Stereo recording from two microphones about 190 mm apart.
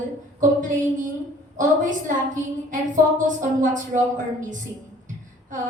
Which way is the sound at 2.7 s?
45° right (ahead or behind).